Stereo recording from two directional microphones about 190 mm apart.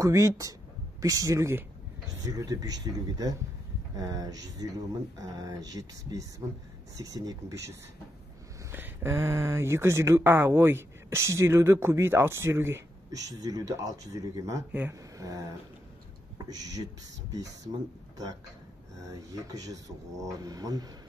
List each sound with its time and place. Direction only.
0.0 s speech: 15° right (ahead or behind)
5.7 s speech: 20° right (ahead or behind)
8.7 s speech: 10° right (ahead or behind)
19.0 s speech: 20° right (ahead or behind)